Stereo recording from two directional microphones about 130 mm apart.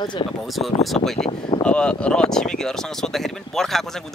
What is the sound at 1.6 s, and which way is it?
Speech, 10° left (ahead or behind).